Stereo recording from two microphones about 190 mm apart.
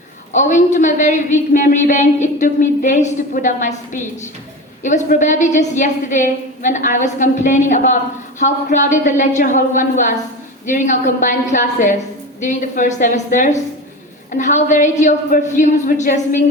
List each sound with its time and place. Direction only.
0.3 s a woman's voice: 40° left (ahead or behind)